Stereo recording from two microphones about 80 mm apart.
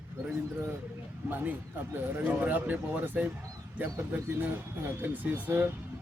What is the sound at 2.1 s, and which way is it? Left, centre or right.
Speech, right.